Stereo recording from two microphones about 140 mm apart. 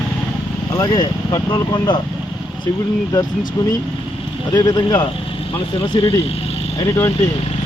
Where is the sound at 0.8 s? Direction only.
30° left (ahead or behind).